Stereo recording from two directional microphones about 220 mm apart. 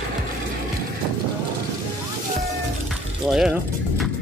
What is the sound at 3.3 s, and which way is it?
Mechanisms, 5° right (ahead or behind).